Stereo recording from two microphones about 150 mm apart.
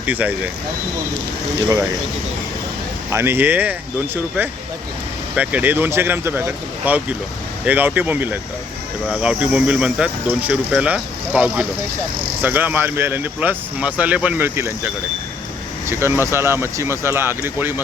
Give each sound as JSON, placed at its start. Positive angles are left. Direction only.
{"t": 0.0, "sound": "speech", "side_deg": -10}
{"t": 3.1, "sound": "speech", "side_deg": -15}